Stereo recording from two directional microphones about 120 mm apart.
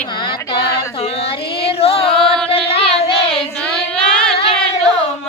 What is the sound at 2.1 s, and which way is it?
Music, 5° left (ahead or behind).